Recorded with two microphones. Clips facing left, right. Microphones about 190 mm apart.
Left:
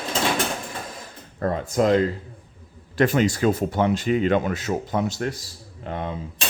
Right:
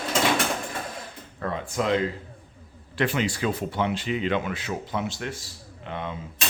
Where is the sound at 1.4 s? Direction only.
40° left (ahead or behind).